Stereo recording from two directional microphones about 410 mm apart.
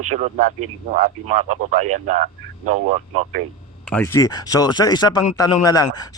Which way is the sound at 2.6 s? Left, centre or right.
Centre.